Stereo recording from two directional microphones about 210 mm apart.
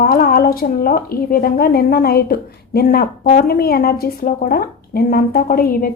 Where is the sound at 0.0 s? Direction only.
45° left (ahead or behind).